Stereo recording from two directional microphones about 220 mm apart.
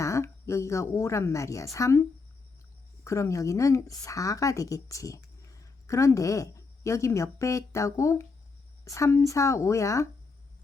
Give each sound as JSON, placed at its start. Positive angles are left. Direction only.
{"t": 0.0, "sound": "a woman's voice", "side_deg": 15}